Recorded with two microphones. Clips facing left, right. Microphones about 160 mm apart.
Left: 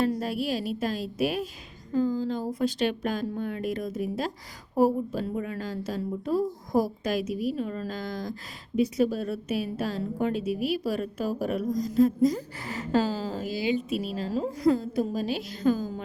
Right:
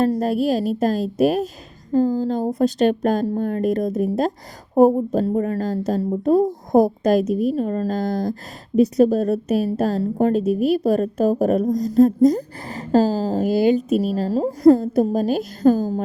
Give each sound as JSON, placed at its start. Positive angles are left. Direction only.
{"t": 0.0, "sound": "a woman's voice", "side_deg": -40}
{"t": 7.3, "sound": "a woman's voice", "side_deg": 5}
{"t": 7.5, "sound": "a woman's voice", "side_deg": -40}
{"t": 10.4, "sound": "a woman's voice", "side_deg": 5}
{"t": 10.7, "sound": "a woman's voice", "side_deg": -40}